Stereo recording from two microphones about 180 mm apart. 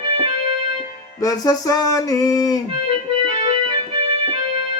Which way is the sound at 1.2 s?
20° left (ahead or behind).